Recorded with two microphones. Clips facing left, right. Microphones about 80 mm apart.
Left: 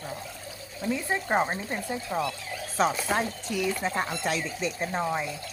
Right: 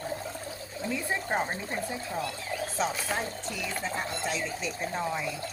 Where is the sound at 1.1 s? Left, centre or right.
Left.